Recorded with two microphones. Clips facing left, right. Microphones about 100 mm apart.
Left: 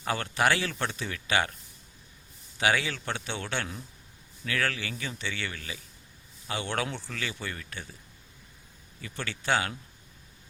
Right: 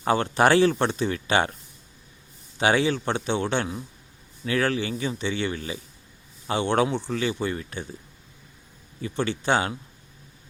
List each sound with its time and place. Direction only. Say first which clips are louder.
0.0 s speech: right 7 dB; 30° right (ahead or behind)
2.6 s speech: right 6 dB; 25° right (ahead or behind)
9.0 s speech: right 11 dB; 25° right (ahead or behind)